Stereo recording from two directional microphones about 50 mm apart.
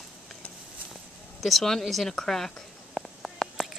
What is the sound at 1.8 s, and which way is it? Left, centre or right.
A woman's voice, centre.